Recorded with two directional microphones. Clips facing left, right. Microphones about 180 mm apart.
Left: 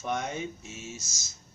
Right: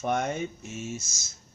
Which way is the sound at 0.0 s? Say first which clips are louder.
Right 4 dB; 55° right (ahead or behind).